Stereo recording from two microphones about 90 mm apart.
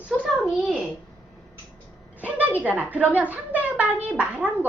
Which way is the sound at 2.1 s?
15° right (ahead or behind).